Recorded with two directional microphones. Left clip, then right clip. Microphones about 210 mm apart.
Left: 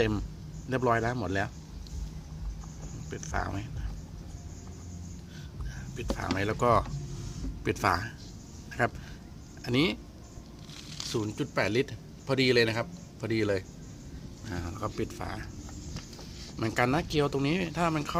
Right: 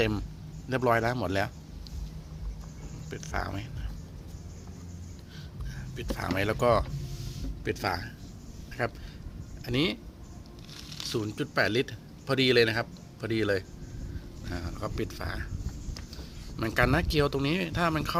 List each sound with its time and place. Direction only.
0.0 s speech: centre (ahead or behind)
3.1 s speech: 10° left (ahead or behind)
6.0 s speech: 5° left (ahead or behind)
7.6 s speech: 25° left (ahead or behind)
10.9 s speech: centre (ahead or behind)
16.6 s speech: centre (ahead or behind)